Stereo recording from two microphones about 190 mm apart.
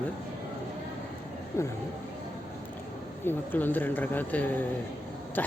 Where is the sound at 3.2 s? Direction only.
10° left (ahead or behind).